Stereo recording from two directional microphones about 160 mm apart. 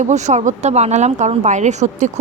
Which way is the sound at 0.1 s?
45° right (ahead or behind).